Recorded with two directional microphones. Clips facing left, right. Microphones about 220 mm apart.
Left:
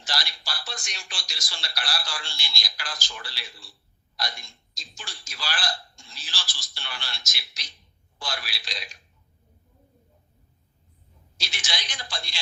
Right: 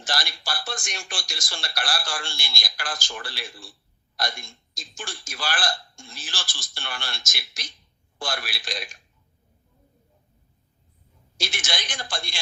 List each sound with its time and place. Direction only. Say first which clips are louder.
0.0 s speech: right 4 dB; 50° right (ahead or behind)
11.3 s speech: right 5 dB; 50° right (ahead or behind)